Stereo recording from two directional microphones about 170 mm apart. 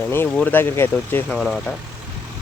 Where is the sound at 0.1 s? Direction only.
10° left (ahead or behind).